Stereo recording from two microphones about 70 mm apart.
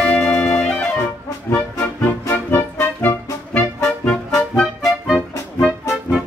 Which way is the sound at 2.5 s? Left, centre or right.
Left.